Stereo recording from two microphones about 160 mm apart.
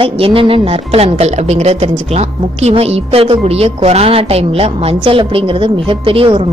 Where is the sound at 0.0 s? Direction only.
35° right (ahead or behind).